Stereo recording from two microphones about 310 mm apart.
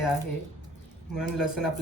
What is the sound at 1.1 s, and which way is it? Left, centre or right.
Speech, centre.